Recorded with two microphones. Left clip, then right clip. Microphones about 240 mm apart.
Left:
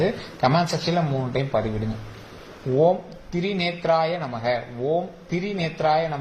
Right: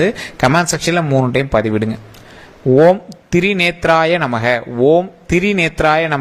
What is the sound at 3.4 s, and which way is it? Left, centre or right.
A man's voice, right.